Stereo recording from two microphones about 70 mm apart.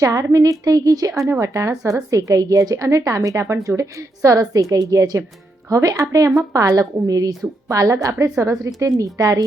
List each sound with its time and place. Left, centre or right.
0.0 s a woman's voice: right
1.3 s a woman's voice: right